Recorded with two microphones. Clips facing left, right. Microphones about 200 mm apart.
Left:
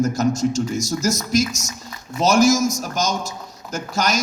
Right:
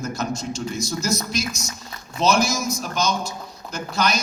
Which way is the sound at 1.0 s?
45° left (ahead or behind).